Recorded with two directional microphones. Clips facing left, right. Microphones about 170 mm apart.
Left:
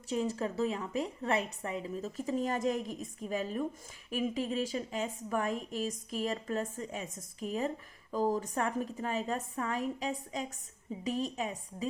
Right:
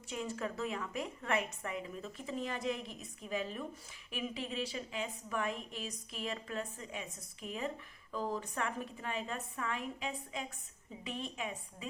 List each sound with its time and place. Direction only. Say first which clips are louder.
0.1 s a woman's voice: left 6 dB; 35° left (ahead or behind)